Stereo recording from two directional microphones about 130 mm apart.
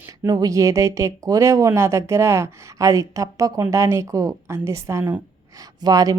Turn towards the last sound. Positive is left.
turn(degrees=-30)  # may be behind; listen again after turning